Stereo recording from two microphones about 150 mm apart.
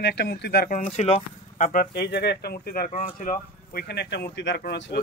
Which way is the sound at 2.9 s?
60° left (ahead or behind).